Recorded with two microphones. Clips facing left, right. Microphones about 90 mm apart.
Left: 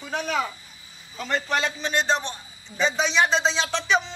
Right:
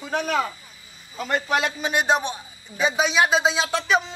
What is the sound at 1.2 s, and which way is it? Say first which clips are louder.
A man's voice: right 2 dB; 5° right (ahead or behind).